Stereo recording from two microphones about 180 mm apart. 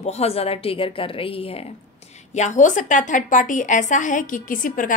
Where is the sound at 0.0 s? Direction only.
35° left (ahead or behind).